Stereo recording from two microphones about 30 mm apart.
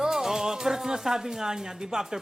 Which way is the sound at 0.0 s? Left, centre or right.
Centre.